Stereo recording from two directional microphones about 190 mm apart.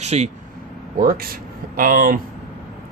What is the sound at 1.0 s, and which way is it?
Speech, 50° right (ahead or behind).